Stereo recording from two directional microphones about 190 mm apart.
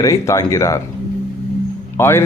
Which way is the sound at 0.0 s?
15° left (ahead or behind).